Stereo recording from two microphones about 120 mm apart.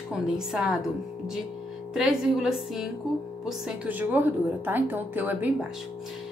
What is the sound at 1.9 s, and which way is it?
A woman's voice, 5° right (ahead or behind).